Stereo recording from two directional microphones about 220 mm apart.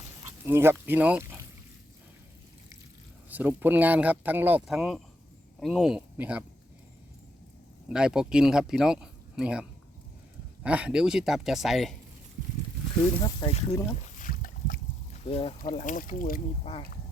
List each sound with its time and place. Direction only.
0.3 s speech: 10° right (ahead or behind)
3.2 s speech: 10° right (ahead or behind)
7.9 s speech: 5° right (ahead or behind)
13.2 s speech: 25° left (ahead or behind)
13.9 s boat: 40° left (ahead or behind)
15.6 s speech: 35° left (ahead or behind)